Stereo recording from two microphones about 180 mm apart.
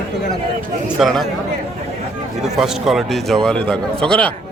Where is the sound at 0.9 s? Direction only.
Centre (ahead or behind).